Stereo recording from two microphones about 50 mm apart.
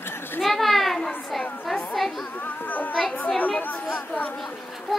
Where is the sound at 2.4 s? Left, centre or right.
Left.